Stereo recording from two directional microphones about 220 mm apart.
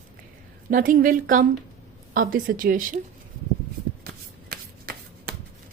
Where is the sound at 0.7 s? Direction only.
40° right (ahead or behind).